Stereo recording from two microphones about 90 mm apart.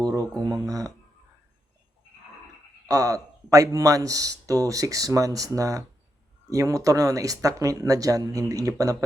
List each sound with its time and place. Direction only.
0.0 s speech: 40° right (ahead or behind)
2.8 s speech: 40° right (ahead or behind)